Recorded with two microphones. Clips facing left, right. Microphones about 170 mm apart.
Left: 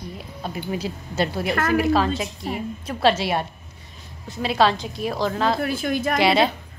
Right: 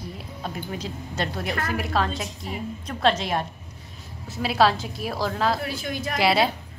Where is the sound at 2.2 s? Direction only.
65° left (ahead or behind).